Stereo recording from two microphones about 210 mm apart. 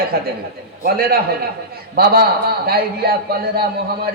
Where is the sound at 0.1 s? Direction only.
45° right (ahead or behind).